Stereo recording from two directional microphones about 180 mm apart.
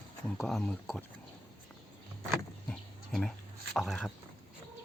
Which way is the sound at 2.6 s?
Centre (ahead or behind).